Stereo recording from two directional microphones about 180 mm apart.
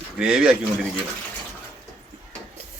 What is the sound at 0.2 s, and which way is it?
Speech, 5° right (ahead or behind).